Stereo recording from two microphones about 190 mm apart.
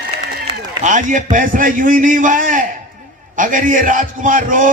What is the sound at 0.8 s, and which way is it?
A man's voice, 40° right (ahead or behind).